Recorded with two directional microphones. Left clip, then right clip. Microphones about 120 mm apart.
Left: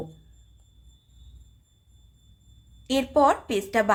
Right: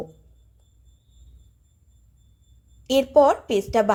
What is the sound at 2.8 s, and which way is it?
Speech, 25° right (ahead or behind).